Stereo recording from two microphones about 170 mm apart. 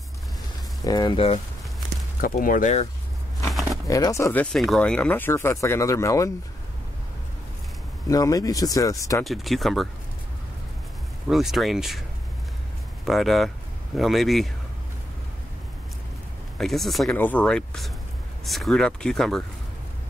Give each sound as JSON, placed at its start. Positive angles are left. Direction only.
{"t": 0.8, "sound": "speech", "side_deg": 25}
{"t": 2.1, "sound": "speech", "side_deg": 55}
{"t": 3.8, "sound": "speech", "side_deg": 20}
{"t": 8.1, "sound": "speech", "side_deg": 20}
{"t": 9.2, "sound": "speech", "side_deg": 0}
{"t": 11.2, "sound": "speech", "side_deg": 0}
{"t": 13.0, "sound": "speech", "side_deg": 0}
{"t": 16.5, "sound": "speech", "side_deg": 0}